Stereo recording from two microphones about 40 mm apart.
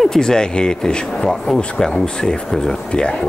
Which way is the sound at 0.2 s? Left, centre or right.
Centre.